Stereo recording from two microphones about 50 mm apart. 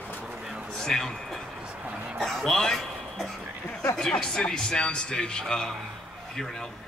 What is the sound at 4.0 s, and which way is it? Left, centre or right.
Speech, centre.